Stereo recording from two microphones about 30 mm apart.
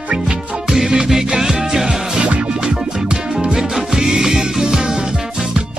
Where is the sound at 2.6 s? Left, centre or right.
Right.